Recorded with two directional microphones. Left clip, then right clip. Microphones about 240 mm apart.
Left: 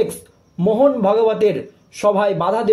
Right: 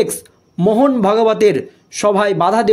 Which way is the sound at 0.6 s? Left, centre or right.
Right.